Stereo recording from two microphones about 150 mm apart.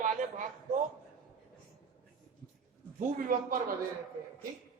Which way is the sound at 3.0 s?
65° right (ahead or behind).